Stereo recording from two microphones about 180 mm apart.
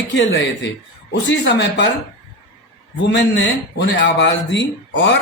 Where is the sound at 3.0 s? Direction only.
80° left.